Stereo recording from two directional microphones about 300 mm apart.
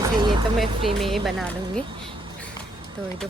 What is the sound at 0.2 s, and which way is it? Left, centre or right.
Vehicle, centre.